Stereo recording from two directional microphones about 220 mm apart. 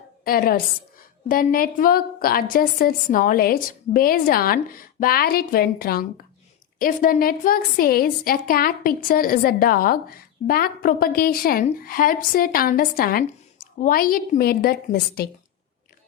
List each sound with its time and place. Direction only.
0.3 s a woman's voice: 40° left (ahead or behind)